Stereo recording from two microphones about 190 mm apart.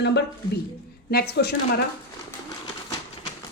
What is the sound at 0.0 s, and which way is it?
A woman's voice, 65° left (ahead or behind).